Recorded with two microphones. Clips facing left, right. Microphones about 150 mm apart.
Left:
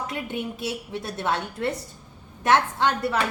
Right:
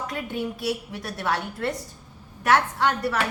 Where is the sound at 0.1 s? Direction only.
20° left (ahead or behind).